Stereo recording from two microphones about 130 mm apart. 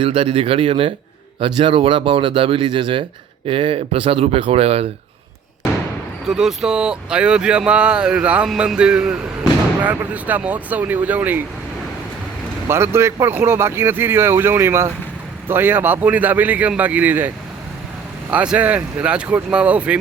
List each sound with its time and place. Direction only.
0.0 s speech: 45° right (ahead or behind)
6.2 s speech: 5° right (ahead or behind)
12.6 s speech: 20° right (ahead or behind)